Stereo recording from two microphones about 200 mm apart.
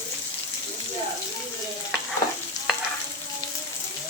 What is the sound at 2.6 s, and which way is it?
Stir, 15° left (ahead or behind).